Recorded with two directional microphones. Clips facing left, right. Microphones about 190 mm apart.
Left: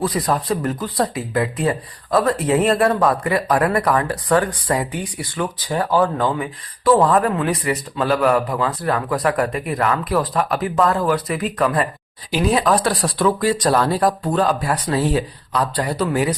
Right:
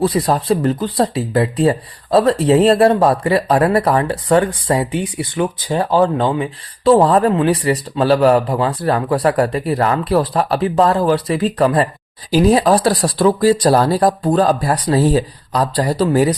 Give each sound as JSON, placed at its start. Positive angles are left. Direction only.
{"t": 0.0, "sound": "speech", "side_deg": -30}